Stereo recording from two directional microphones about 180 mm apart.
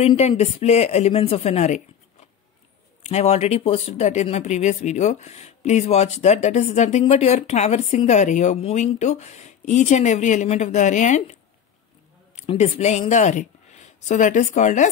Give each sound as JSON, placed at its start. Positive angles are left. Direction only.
{"t": 0.0, "sound": "speech", "side_deg": 35}
{"t": 3.0, "sound": "speech", "side_deg": 35}
{"t": 12.4, "sound": "speech", "side_deg": 35}